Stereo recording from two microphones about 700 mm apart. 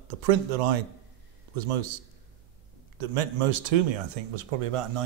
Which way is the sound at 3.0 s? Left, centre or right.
Right.